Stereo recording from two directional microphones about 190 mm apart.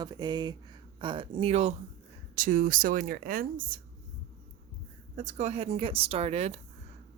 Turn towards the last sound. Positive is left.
turn(degrees=-35)  # may be behind; listen again after turning